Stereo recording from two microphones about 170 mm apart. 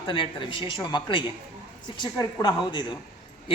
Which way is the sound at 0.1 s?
30° left (ahead or behind).